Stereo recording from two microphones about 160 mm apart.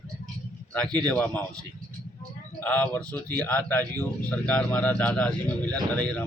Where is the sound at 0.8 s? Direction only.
25° right (ahead or behind).